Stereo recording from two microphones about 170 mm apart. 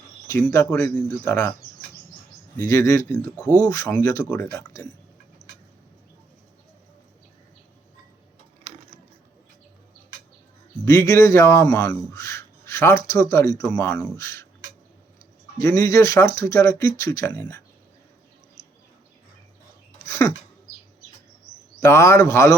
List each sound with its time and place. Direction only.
0.3 s speech: 15° left (ahead or behind)
2.6 s speech: 15° left (ahead or behind)
10.8 s speech: 15° left (ahead or behind)
15.6 s speech: 15° left (ahead or behind)
20.1 s a sound: 15° left (ahead or behind)
21.8 s speech: 15° left (ahead or behind)